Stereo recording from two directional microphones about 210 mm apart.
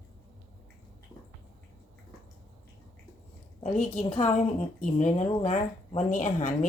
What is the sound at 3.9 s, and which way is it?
Speech, 35° left (ahead or behind).